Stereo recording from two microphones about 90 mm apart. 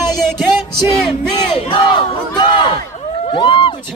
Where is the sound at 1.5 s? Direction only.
75° left (ahead or behind).